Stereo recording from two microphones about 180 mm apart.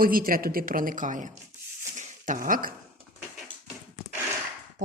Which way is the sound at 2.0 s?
45° right (ahead or behind).